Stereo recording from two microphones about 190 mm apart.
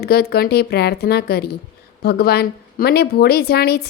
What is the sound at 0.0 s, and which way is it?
A woman's voice, 55° left (ahead or behind).